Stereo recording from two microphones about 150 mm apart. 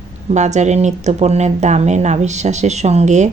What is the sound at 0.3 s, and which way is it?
Speech, 50° right (ahead or behind).